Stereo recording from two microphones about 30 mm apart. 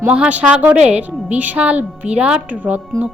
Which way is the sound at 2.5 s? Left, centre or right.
Right.